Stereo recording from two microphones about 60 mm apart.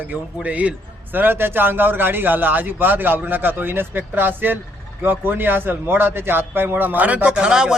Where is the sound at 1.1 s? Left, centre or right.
Right.